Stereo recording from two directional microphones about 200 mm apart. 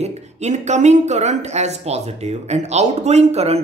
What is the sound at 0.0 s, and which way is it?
A woman's voice, 35° right (ahead or behind).